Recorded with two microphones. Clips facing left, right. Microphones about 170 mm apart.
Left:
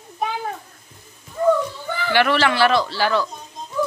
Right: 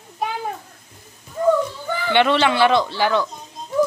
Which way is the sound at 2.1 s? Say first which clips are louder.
Right 1 dB; 20° right (ahead or behind).